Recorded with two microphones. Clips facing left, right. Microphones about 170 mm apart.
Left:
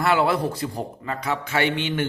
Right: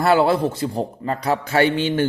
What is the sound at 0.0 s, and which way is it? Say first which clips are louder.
A man's voice: right 4 dB; 35° right (ahead or behind).